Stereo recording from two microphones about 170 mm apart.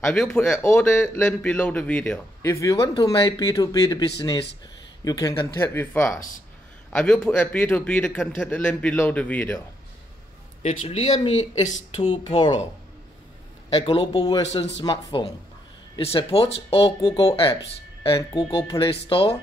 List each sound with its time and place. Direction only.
0.0 s a man's voice: 5° left (ahead or behind)
2.5 s speech: 20° left (ahead or behind)
5.0 s a man's voice: 20° left (ahead or behind)
10.6 s speech: 40° left (ahead or behind)
12.3 s speech: 25° left (ahead or behind)
13.7 s speech: 35° left (ahead or behind)